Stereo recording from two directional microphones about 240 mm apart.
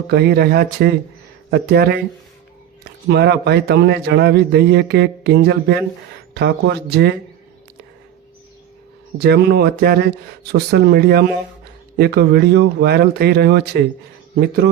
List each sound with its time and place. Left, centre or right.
0.1 s a man's voice: right
3.1 s a man's voice: right
9.1 s a man's voice: right